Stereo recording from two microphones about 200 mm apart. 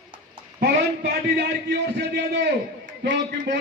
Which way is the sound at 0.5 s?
55° right (ahead or behind).